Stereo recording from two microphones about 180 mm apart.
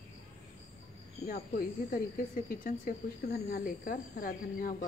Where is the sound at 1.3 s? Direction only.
55° left (ahead or behind).